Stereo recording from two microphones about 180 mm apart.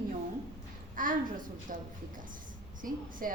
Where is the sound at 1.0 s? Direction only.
50° right (ahead or behind).